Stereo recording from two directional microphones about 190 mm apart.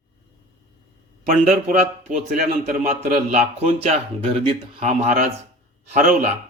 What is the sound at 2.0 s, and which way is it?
Speech, 40° right (ahead or behind).